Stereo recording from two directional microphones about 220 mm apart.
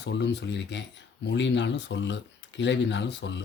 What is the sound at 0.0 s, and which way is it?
Speech, 50° left (ahead or behind).